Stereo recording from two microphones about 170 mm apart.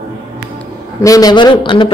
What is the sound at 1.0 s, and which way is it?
Speech, 20° left (ahead or behind).